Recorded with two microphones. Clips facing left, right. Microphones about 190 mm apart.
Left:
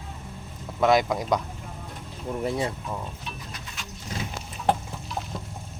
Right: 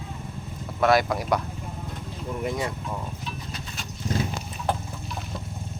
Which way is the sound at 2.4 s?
30° left (ahead or behind).